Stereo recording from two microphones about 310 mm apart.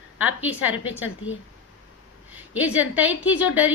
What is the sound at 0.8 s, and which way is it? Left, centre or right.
Speech, left.